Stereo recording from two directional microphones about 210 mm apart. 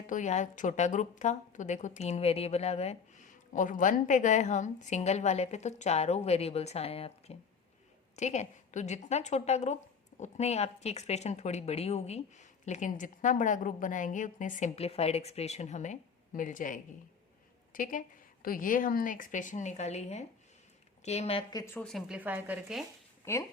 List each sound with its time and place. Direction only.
0.1 s a woman's voice: 35° left (ahead or behind)
21.7 s speech: 5° left (ahead or behind)